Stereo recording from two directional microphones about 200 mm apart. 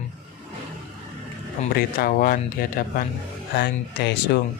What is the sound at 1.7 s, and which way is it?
Speech, 45° left (ahead or behind).